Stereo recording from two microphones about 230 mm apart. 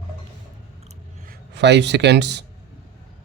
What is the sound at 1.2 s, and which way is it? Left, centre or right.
Speech, right.